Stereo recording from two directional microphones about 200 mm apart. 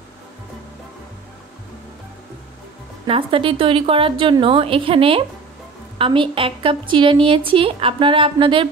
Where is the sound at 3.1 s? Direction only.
25° right (ahead or behind).